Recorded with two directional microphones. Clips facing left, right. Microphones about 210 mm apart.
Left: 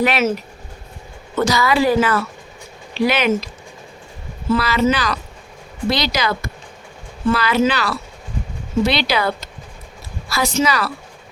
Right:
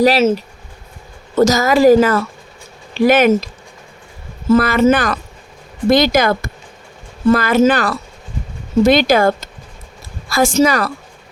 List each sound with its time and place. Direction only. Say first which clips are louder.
0.0 s speech: right 6 dB; 30° right (ahead or behind)
1.4 s a woman's voice: right 5 dB; 45° right (ahead or behind)
4.4 s a woman's voice: right 6 dB; 50° right (ahead or behind)